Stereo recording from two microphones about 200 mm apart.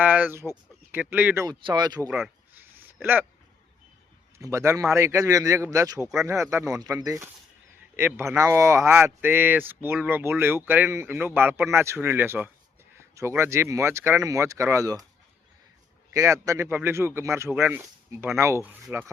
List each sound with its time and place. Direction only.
0.0 s speech: 10° right (ahead or behind)
1.5 s speech: 20° right (ahead or behind)
2.0 s a sound: 5° right (ahead or behind)
4.4 s speech: 15° right (ahead or behind)
16.1 s speech: 15° right (ahead or behind)